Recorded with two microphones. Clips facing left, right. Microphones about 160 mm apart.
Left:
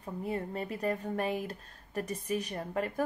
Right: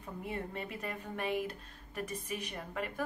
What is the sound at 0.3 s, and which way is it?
A woman's voice, 35° left (ahead or behind).